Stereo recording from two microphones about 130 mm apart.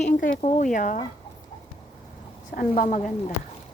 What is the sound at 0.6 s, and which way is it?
Speech, 75° left (ahead or behind).